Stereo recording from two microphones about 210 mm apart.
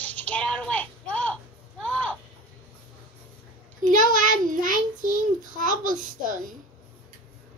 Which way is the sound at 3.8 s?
40° right (ahead or behind).